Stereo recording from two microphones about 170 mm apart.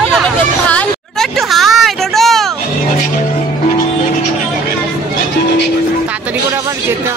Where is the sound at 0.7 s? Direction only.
Centre (ahead or behind).